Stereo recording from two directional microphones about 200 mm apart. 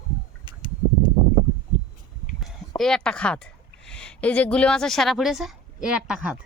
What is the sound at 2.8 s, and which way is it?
A woman's voice, 5° left (ahead or behind).